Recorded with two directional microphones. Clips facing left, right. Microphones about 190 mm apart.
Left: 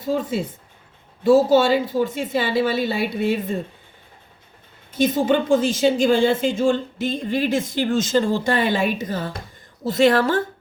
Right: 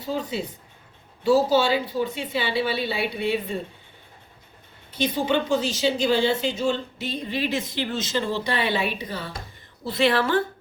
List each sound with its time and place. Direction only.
0.0 s speech: 50° left (ahead or behind)
4.9 s speech: 45° left (ahead or behind)